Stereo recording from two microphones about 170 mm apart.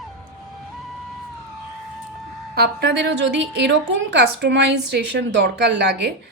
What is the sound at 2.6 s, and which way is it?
Speech, 75° right (ahead or behind).